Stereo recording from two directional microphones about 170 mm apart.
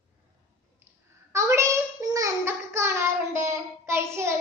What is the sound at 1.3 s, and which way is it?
Child singing, 15° right (ahead or behind).